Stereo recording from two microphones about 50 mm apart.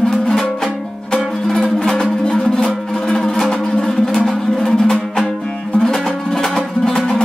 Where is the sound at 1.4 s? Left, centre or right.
Centre.